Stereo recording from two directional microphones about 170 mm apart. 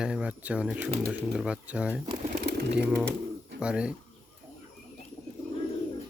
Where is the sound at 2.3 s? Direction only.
75° right (ahead or behind).